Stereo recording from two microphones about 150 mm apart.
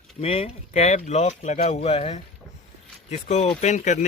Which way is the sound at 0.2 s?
40° left (ahead or behind).